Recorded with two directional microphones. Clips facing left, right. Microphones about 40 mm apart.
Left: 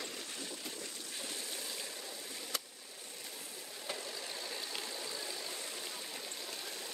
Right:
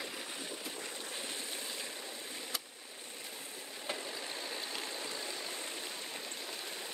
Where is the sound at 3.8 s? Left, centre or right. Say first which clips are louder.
Right 2 dB; right.